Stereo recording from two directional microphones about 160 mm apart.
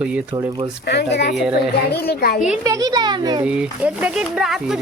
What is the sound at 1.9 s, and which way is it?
Speech, 80° left.